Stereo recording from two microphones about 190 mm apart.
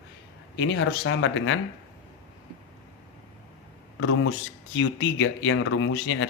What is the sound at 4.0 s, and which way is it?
Speech, 90° left.